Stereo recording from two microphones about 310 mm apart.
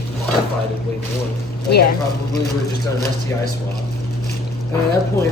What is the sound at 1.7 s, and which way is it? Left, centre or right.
Speech, left.